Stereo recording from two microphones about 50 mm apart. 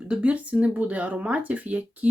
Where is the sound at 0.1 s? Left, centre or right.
Right.